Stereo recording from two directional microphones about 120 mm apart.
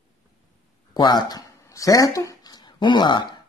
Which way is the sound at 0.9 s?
35° left (ahead or behind).